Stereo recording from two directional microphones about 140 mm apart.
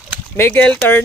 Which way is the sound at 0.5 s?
10° left (ahead or behind).